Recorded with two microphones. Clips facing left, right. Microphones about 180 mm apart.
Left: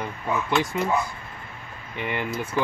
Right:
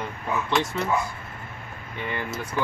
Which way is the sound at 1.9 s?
15° left (ahead or behind).